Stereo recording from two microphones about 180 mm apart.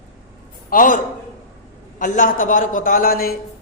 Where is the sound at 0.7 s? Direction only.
45° left (ahead or behind).